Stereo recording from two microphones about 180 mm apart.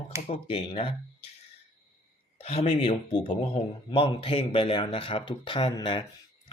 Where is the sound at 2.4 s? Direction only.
35° left (ahead or behind).